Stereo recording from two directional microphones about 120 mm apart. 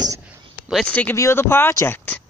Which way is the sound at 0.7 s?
10° left (ahead or behind).